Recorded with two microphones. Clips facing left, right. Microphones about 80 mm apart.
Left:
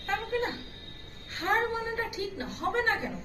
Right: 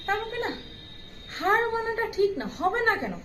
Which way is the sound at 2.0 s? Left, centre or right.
Right.